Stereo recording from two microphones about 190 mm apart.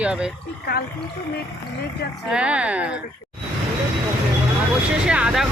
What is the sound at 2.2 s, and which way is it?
Speech, 5° right (ahead or behind).